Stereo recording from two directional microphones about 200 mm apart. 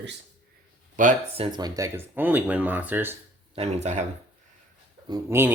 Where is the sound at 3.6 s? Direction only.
35° right (ahead or behind).